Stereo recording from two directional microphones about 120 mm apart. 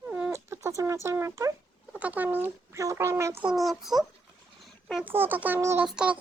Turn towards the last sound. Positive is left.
turn(degrees=-5)  # may be behind; listen again after turning